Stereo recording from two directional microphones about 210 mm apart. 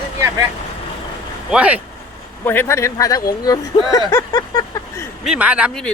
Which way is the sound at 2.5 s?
10° left (ahead or behind).